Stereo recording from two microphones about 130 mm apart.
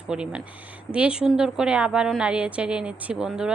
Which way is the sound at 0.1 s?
5° right (ahead or behind).